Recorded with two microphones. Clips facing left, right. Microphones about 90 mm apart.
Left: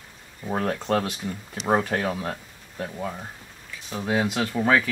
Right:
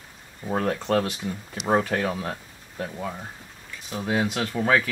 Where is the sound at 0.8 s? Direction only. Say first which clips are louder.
Right 1 dB; 20° left (ahead or behind).